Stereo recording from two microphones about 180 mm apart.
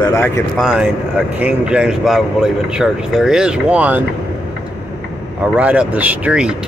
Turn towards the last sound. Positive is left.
turn(degrees=-5)  # may be behind; listen again after turning